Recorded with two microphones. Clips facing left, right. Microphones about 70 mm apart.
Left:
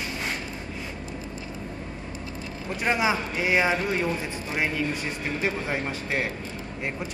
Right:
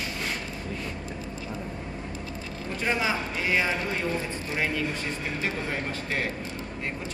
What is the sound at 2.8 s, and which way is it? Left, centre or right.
Speech, centre.